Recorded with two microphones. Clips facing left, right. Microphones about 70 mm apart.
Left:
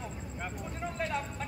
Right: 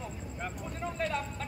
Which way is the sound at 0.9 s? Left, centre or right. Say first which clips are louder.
Right 1 dB; centre.